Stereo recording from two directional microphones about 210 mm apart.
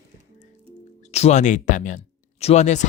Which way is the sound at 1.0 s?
30° left (ahead or behind).